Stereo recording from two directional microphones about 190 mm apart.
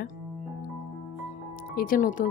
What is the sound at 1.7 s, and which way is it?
Speech, 50° left (ahead or behind).